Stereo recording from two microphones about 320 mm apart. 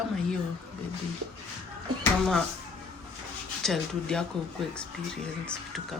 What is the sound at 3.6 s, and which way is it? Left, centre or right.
Speech, centre.